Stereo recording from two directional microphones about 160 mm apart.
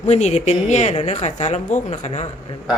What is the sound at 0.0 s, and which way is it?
Speech, 45° left (ahead or behind).